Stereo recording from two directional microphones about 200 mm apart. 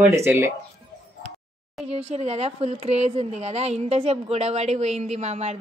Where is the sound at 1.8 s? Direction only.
30° right (ahead or behind).